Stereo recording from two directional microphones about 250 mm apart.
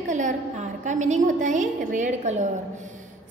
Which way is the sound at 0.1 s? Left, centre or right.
Right.